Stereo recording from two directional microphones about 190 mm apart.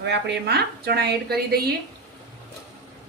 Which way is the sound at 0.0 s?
60° right (ahead or behind).